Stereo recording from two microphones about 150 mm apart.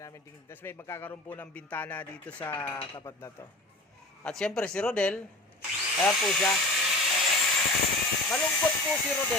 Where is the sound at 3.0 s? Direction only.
20° left (ahead or behind).